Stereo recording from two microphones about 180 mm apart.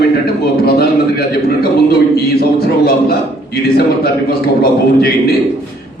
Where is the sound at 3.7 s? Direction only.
60° left (ahead or behind).